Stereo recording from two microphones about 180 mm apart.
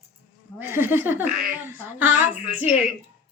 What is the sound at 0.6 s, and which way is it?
Speech, 10° right (ahead or behind).